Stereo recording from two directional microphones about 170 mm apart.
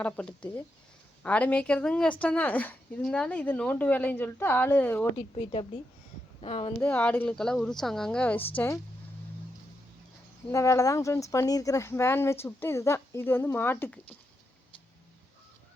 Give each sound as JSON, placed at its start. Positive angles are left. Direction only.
{"t": 0.0, "sound": "a woman's voice", "side_deg": 5}
{"t": 5.1, "sound": "a woman's voice", "side_deg": 35}
{"t": 6.8, "sound": "a woman's voice", "side_deg": 10}
{"t": 10.5, "sound": "a woman's voice", "side_deg": 20}